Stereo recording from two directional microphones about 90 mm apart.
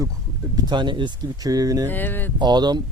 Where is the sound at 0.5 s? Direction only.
55° right (ahead or behind).